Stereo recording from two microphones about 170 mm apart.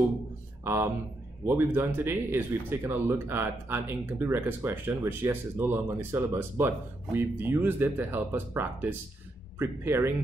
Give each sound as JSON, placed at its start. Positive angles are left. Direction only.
{"t": 0.7, "sound": "speech", "side_deg": -15}